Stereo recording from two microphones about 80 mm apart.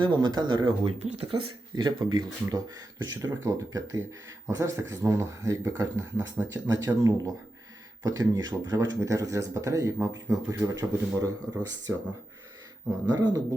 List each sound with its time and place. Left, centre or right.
0.0 s speech: right
1.3 s speech: right
3.2 s speech: right
8.0 s speech: right
13.1 s speech: right